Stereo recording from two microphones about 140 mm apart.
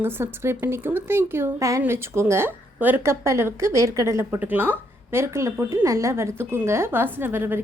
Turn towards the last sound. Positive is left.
turn(degrees=-15)  # may be behind; listen again after turning